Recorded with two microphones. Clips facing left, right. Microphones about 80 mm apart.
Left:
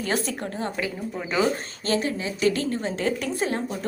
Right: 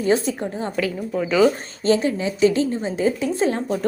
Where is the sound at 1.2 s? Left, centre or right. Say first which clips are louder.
Right 7 dB; left.